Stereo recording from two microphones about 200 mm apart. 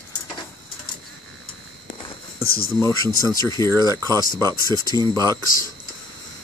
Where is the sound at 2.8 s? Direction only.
15° left (ahead or behind).